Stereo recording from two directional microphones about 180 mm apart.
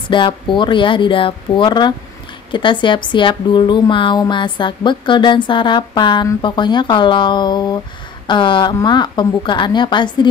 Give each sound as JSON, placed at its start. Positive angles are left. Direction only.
{"t": 0.1, "sound": "a woman's voice", "side_deg": 25}